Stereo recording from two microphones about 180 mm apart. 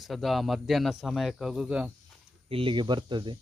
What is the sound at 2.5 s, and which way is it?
Speech, 30° right (ahead or behind).